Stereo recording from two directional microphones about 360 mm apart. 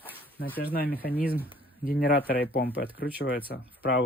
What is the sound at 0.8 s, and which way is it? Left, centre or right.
Speech, centre.